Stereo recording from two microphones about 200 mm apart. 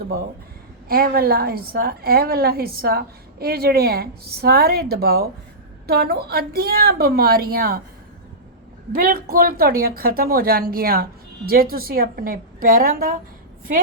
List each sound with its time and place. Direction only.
0.9 s a woman's voice: 50° right (ahead or behind)
8.9 s a woman's voice: 45° right (ahead or behind)